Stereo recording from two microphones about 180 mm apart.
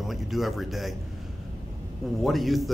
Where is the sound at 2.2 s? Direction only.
Centre (ahead or behind).